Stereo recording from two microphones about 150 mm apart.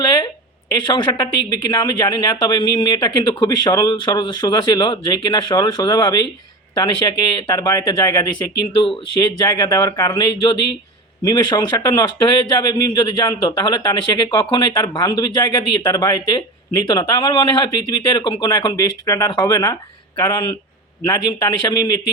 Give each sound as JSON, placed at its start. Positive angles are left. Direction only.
{"t": 0.9, "sound": "speech", "side_deg": 30}
{"t": 21.1, "sound": "speech", "side_deg": 30}